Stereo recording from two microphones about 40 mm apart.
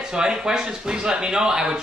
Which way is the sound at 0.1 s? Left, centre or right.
Centre.